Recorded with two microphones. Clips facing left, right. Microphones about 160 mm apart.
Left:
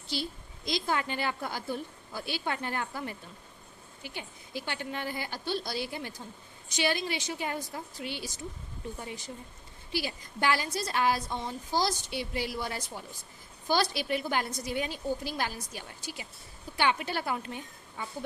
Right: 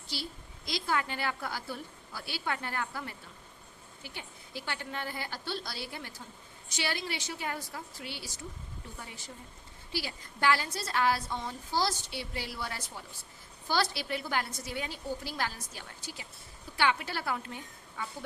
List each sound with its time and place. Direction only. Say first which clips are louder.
0.1 s a woman's voice: left 5 dB; 20° left (ahead or behind)